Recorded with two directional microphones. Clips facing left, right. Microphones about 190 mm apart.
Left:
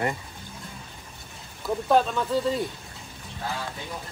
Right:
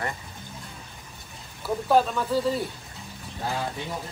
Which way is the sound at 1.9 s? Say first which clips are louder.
Even; 5° right (ahead or behind).